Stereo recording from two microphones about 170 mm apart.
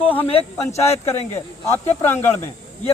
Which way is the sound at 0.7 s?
40° left (ahead or behind).